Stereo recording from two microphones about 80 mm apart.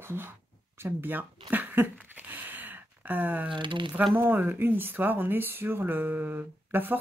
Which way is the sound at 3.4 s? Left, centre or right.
Right.